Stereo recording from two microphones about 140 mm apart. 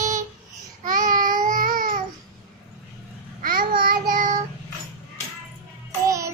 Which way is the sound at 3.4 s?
90° right.